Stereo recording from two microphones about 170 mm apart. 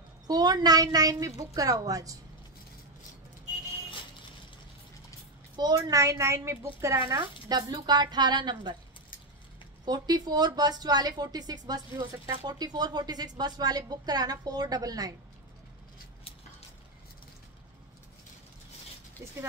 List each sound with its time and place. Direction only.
0.3 s speech: 25° right (ahead or behind)
5.6 s speech: 20° right (ahead or behind)
9.8 s speech: 25° right (ahead or behind)